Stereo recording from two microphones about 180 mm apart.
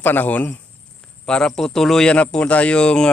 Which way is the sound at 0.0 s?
10° left (ahead or behind).